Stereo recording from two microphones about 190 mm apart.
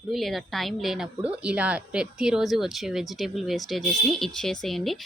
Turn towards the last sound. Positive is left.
turn(degrees=0)  # may be behind; listen again after turning